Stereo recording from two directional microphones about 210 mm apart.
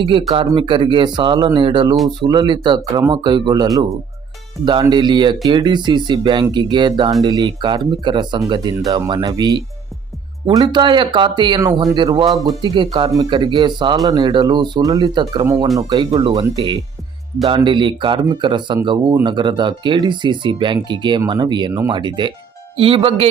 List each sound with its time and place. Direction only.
0.0 s speech: 25° right (ahead or behind)